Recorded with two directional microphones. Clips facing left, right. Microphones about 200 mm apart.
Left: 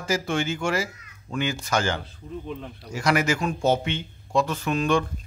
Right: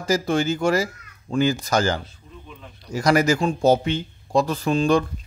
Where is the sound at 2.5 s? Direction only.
55° left (ahead or behind).